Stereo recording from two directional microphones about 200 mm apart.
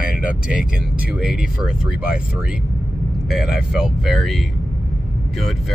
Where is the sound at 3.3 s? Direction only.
Centre (ahead or behind).